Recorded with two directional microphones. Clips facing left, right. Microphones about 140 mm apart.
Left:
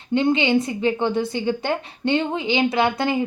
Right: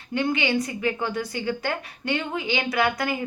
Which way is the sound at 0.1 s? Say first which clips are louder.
Left 6 dB; 25° left (ahead or behind).